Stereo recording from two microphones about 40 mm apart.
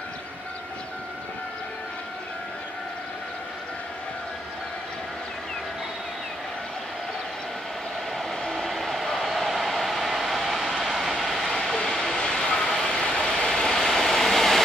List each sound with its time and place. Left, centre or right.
8.2 s vehicle: centre
11.4 s vehicle: centre